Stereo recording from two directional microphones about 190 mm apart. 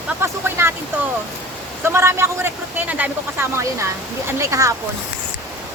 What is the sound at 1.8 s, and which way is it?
A man's voice, 15° right (ahead or behind).